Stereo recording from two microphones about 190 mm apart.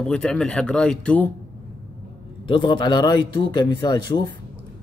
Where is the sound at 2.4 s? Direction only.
25° left (ahead or behind).